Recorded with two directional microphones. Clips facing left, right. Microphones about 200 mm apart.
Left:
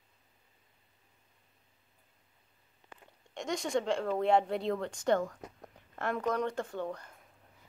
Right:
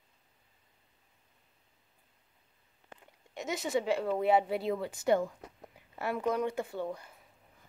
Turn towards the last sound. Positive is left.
turn(degrees=-5)  # may be behind; listen again after turning